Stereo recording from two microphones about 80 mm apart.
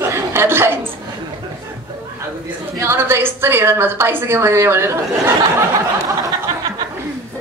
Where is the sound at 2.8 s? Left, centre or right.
Right.